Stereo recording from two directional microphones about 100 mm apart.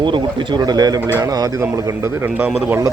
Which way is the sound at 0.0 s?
50° right (ahead or behind).